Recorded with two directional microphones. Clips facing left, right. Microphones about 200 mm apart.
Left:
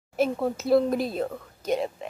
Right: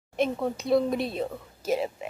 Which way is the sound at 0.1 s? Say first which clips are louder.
Left 2 dB; 5° left (ahead or behind).